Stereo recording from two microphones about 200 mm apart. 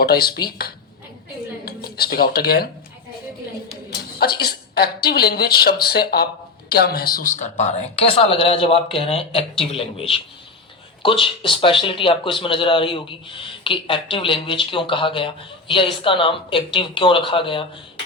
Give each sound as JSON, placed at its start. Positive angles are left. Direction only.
{"t": 0.0, "sound": "speech", "side_deg": 50}
{"t": 3.8, "sound": "a woman's voice", "side_deg": 50}
{"t": 7.3, "sound": "speech", "side_deg": 35}